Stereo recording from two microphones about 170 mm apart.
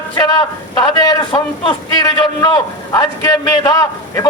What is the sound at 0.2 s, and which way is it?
A man's voice, 20° left (ahead or behind).